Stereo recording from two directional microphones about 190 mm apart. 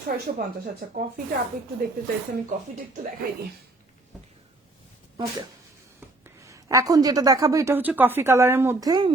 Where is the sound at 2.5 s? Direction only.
45° right (ahead or behind).